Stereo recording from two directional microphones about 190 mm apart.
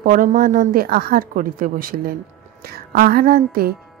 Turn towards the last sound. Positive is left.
turn(degrees=-50)  # may be behind; listen again after turning